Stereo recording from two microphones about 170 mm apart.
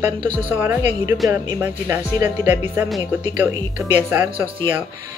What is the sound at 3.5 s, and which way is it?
Speech, 20° right (ahead or behind).